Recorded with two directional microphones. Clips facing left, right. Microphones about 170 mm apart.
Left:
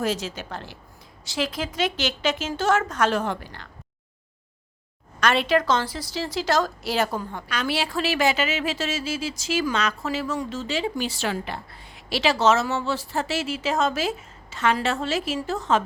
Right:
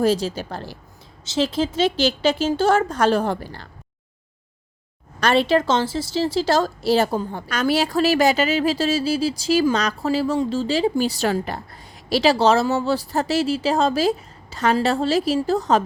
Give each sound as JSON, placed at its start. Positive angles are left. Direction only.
{"t": 0.0, "sound": "a woman's voice", "side_deg": -35}
{"t": 1.2, "sound": "a woman's voice", "side_deg": -25}
{"t": 5.2, "sound": "a woman's voice", "side_deg": -30}